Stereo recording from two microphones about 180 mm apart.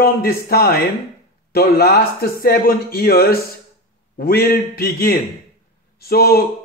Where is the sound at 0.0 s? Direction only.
60° left (ahead or behind).